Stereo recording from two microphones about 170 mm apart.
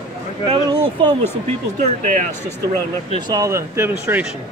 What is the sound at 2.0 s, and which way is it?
Speech, 50° right (ahead or behind).